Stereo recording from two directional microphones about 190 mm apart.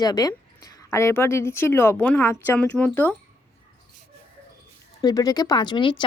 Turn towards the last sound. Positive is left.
turn(degrees=25)  # may be behind; listen again after turning